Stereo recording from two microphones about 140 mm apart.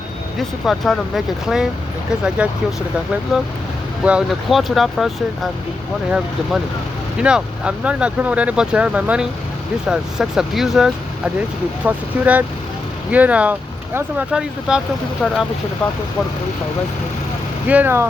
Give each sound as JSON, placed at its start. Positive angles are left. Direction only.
{"t": 0.3, "sound": "speech", "side_deg": 0}
{"t": 4.0, "sound": "speech", "side_deg": -5}
{"t": 15.2, "sound": "speech", "side_deg": 10}
{"t": 17.7, "sound": "speech", "side_deg": -15}